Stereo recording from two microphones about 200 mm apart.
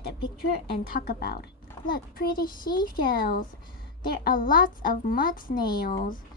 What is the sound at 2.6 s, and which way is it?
Speech, 20° left (ahead or behind).